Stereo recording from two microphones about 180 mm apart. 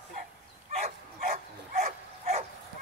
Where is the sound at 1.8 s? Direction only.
40° right (ahead or behind).